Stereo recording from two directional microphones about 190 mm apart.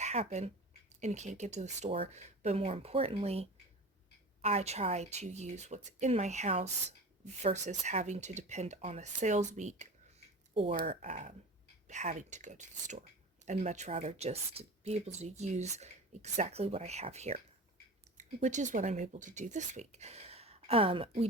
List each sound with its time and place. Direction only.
0.0 s speech: 35° right (ahead or behind)
10.8 s speech: 40° right (ahead or behind)